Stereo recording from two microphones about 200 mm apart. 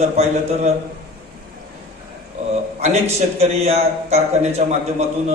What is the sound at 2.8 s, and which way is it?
A man's voice, 35° right (ahead or behind).